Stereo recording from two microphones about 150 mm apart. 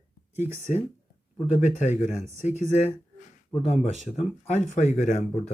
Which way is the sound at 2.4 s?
50° left (ahead or behind).